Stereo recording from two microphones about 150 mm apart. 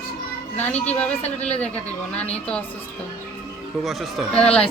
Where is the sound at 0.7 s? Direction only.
45° left (ahead or behind).